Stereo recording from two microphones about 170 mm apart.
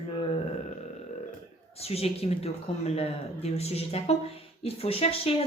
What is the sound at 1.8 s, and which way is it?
Speech, 35° left (ahead or behind).